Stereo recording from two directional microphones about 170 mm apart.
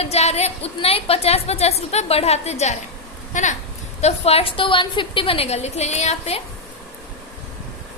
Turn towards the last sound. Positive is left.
turn(degrees=40)  # may be behind; listen again after turning